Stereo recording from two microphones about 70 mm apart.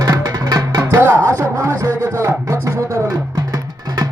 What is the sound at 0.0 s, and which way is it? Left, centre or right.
Music, right.